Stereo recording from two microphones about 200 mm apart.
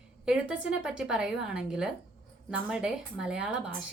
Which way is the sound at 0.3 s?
5° right (ahead or behind).